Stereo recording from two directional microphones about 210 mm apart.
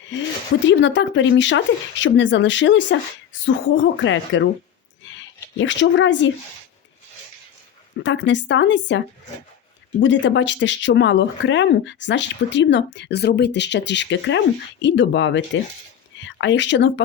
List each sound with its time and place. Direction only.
0.6 s speech: 60° left (ahead or behind)
5.0 s a sound: 65° left (ahead or behind)
5.5 s speech: 60° left (ahead or behind)
8.0 s speech: 60° left (ahead or behind)
10.0 s speech: 60° left (ahead or behind)